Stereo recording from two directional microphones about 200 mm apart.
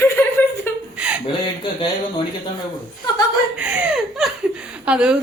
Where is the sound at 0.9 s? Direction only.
5° right (ahead or behind).